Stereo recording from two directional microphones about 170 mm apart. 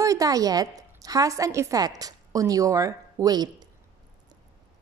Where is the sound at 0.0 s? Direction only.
20° right (ahead or behind).